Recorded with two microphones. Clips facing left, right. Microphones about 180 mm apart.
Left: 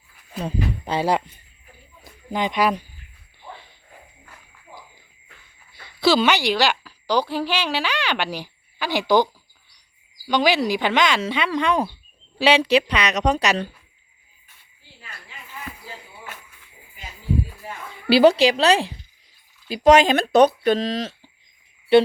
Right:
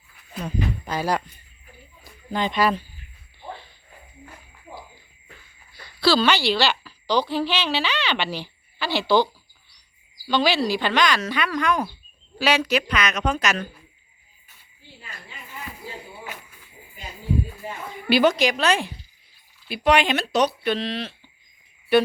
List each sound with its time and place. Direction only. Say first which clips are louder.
0.4 s speech: left 1 dB; 30° left (ahead or behind)
2.3 s speech: left 1 dB; 15° left (ahead or behind)
6.0 s a woman's voice: left 1 dB; 20° left (ahead or behind)
18.1 s a woman's voice: left 4 dB; 35° left (ahead or behind)